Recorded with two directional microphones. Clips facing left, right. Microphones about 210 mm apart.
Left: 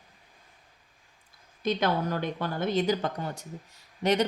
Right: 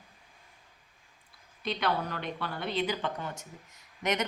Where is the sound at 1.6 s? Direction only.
45° left (ahead or behind).